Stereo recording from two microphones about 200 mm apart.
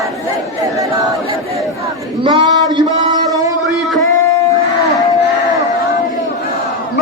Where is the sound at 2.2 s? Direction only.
20° right (ahead or behind).